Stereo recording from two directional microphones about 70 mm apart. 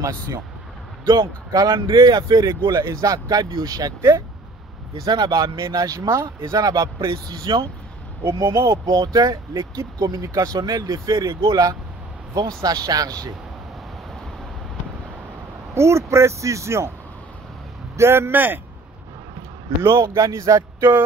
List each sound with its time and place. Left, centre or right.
1.0 s speech: right
2.8 s speech: right
5.0 s speech: right
7.1 s speech: right
8.3 s speech: right
8.8 s speech: right
15.7 s speech: right
17.9 s speech: right
18.3 s a man's voice: right
19.8 s speech: right
20.2 s speech: right